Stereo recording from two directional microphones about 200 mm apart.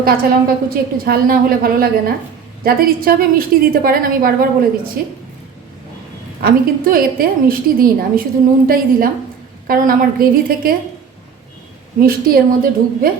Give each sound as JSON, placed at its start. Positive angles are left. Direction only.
{"t": 0.0, "sound": "a woman's voice", "side_deg": -50}
{"t": 6.4, "sound": "a woman's voice", "side_deg": -45}
{"t": 11.9, "sound": "a woman's voice", "side_deg": -45}